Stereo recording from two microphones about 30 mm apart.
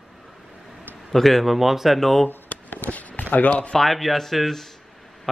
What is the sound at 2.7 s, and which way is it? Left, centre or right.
Speech, left.